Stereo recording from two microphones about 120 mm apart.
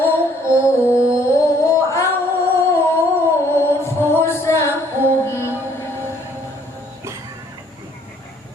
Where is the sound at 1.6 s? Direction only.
20° left (ahead or behind).